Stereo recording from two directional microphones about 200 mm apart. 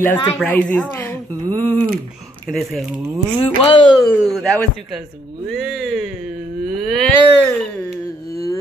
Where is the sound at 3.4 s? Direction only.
25° left (ahead or behind).